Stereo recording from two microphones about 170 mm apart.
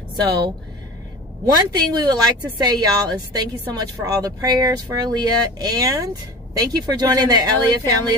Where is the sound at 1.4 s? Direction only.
25° right (ahead or behind).